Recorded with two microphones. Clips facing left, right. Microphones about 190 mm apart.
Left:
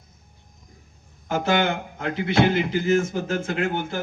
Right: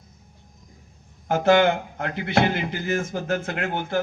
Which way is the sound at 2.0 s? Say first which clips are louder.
Left 6 dB; 60° right (ahead or behind).